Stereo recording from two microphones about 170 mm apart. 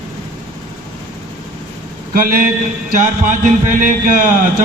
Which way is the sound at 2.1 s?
60° right (ahead or behind).